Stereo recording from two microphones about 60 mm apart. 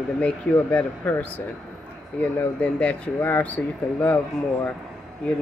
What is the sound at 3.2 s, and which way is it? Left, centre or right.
Speech, left.